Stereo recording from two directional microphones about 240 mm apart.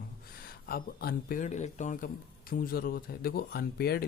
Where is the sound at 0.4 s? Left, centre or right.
Left.